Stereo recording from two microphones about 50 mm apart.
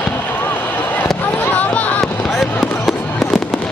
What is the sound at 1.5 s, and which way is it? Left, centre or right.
Music, left.